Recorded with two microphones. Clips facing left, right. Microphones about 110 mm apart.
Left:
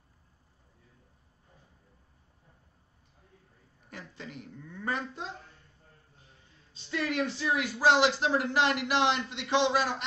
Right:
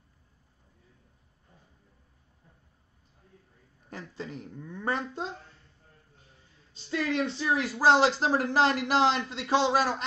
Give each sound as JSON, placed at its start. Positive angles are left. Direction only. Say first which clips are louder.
{"t": 3.9, "sound": "speech", "louder": "right 5 dB", "side_deg": -35}
{"t": 7.1, "sound": "speech", "louder": "right 2 dB", "side_deg": -25}